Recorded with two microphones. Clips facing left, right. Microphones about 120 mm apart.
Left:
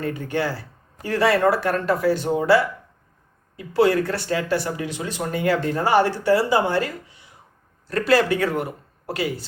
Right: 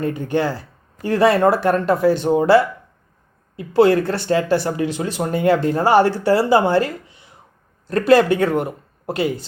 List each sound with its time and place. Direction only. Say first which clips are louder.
0.0 s speech: right 4 dB; 20° right (ahead or behind)
3.7 s speech: right 4 dB; 25° right (ahead or behind)